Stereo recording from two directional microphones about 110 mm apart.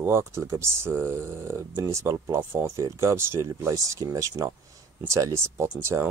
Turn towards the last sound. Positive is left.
turn(degrees=-25)  # may be behind; listen again after turning